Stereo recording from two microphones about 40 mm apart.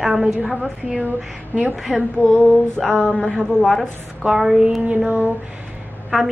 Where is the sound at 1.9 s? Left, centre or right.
Centre.